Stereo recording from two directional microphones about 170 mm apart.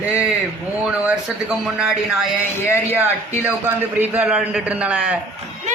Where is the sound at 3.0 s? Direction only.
10° right (ahead or behind).